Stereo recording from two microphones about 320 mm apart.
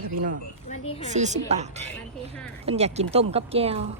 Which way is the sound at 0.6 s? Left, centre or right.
Centre.